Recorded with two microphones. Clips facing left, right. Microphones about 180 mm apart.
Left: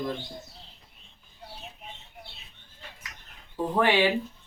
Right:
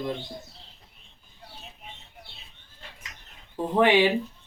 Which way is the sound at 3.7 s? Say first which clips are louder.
Right 3 dB; 15° right (ahead or behind).